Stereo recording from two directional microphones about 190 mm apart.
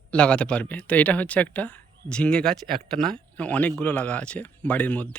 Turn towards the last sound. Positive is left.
turn(degrees=10)  # may be behind; listen again after turning